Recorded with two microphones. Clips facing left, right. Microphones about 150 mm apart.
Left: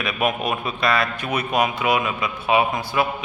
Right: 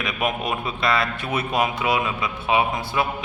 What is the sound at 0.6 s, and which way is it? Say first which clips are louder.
A man's voice: left 1 dB; 25° right (ahead or behind).